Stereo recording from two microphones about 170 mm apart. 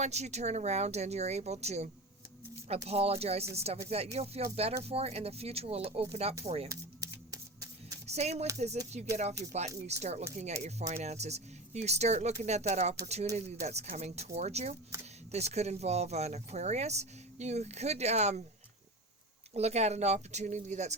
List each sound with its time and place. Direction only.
0.0 s speech: 40° right (ahead or behind)
6.7 s a sound: 20° right (ahead or behind)
8.0 s speech: 40° right (ahead or behind)
19.5 s speech: 40° right (ahead or behind)